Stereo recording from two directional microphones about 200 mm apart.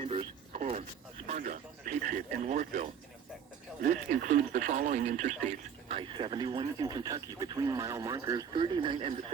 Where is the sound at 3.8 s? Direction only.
40° right (ahead or behind).